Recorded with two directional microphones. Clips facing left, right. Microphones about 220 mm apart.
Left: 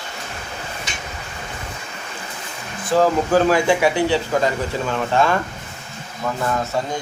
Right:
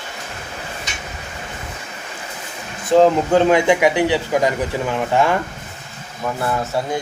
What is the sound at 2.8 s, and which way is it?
Speech, 25° right (ahead or behind).